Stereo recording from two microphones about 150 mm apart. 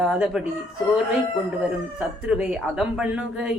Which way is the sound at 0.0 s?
5° right (ahead or behind).